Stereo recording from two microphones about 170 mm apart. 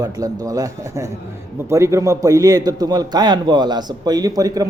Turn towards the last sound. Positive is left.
turn(degrees=-20)  # may be behind; listen again after turning